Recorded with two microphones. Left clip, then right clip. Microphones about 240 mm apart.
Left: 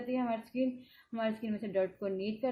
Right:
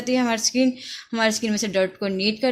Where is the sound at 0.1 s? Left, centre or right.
Right.